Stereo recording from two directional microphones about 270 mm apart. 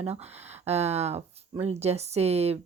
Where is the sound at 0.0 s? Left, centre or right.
Right.